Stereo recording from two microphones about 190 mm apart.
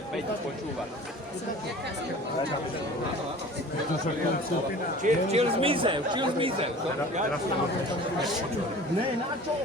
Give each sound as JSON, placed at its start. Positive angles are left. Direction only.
{"t": 5.0, "sound": "speech", "side_deg": -35}